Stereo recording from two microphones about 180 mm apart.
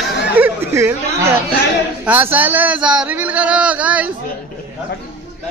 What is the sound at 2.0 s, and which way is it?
Speech, 10° right (ahead or behind).